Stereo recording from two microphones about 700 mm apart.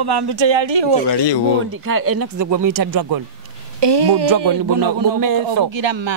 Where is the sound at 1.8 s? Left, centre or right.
Centre; by 6.1 s right.